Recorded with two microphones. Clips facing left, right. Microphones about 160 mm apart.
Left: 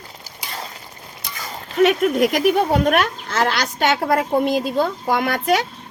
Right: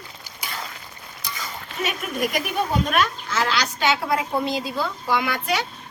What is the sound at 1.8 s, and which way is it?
Speech, 70° left (ahead or behind).